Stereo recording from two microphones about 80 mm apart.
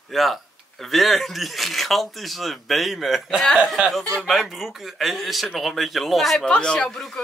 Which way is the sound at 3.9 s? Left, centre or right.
Centre.